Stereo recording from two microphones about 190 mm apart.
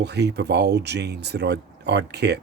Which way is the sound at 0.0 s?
60° right (ahead or behind).